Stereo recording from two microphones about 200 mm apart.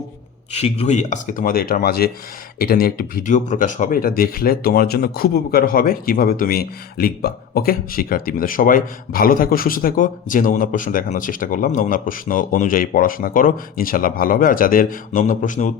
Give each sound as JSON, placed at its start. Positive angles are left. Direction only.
{"t": 0.5, "sound": "speech", "side_deg": 35}